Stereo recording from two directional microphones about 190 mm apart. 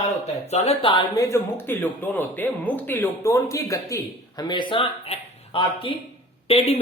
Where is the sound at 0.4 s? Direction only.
35° left (ahead or behind).